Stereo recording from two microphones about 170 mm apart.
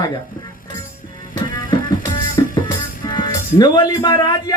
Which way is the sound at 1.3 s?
25° left (ahead or behind).